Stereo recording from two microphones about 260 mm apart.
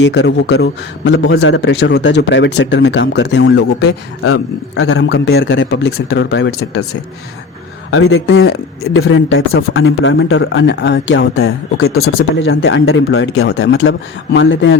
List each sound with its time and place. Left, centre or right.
0.0 s speech: left
4.7 s speech: left
7.9 s speech: left